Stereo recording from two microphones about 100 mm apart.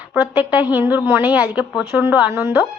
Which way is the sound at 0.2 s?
20° right (ahead or behind).